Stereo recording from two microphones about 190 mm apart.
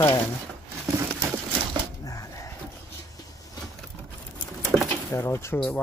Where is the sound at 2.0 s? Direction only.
15° left (ahead or behind).